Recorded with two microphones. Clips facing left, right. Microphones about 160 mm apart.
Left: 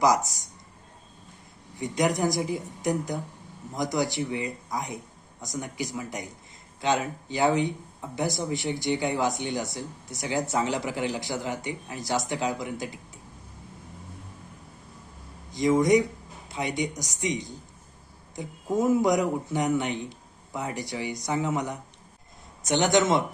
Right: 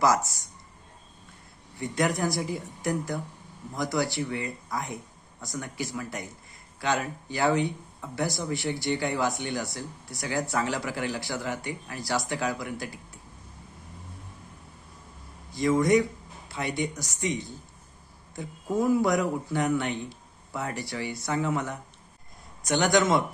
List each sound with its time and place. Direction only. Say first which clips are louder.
0.0 s speech: left 1 dB; 15° left (ahead or behind)
1.7 s speech: left 2 dB; 20° left (ahead or behind)
15.5 s speech: left 1 dB; 20° left (ahead or behind)